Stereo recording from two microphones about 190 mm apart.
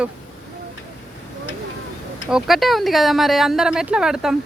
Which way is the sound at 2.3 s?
Centre (ahead or behind).